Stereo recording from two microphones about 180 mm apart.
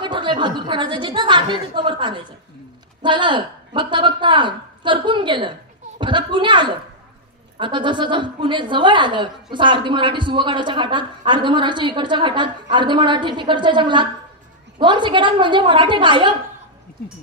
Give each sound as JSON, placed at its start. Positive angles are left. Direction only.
{"t": 0.0, "sound": "a woman's voice", "side_deg": -25}